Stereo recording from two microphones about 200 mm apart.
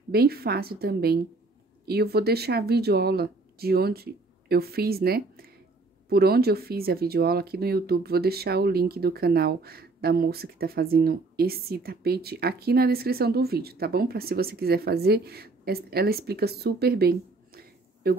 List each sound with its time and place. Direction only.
0.1 s speech: 50° right (ahead or behind)